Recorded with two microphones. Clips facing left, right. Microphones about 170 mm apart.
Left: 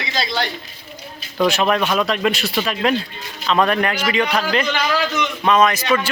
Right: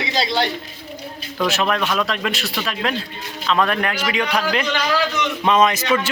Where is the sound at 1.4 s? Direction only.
Centre (ahead or behind).